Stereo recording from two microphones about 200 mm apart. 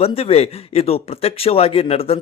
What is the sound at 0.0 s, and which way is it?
Speech, 30° left (ahead or behind).